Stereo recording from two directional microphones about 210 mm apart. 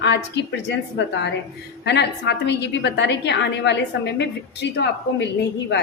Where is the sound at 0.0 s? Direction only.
55° left (ahead or behind).